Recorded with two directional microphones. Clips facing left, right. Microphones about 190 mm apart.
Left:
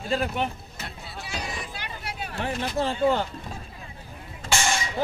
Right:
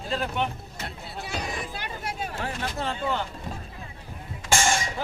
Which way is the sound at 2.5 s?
30° left (ahead or behind).